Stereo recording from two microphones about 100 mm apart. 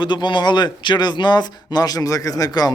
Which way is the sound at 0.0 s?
50° left (ahead or behind).